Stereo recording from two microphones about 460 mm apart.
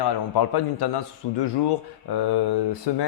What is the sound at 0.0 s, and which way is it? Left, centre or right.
A man's voice, left.